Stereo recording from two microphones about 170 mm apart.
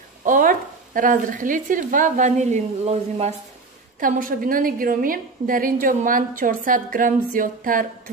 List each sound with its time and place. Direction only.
0.2 s speech: 50° right (ahead or behind)
4.0 s a woman's voice: 55° right (ahead or behind)